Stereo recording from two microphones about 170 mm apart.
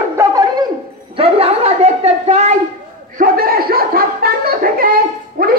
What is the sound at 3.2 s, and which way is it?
Speech, 60° right (ahead or behind).